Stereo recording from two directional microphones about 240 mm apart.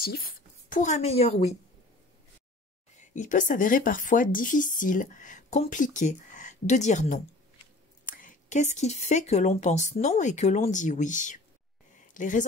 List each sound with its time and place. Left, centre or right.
0.0 s a woman's voice: left
3.2 s speech: left